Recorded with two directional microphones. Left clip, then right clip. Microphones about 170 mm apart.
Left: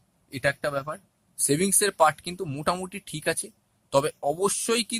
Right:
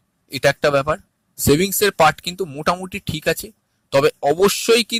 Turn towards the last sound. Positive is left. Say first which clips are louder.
# right 11 dB
turn(degrees=-25)  # may be behind; listen again after turning